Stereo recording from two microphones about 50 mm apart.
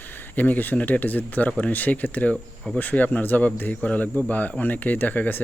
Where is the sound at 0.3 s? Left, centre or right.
Left.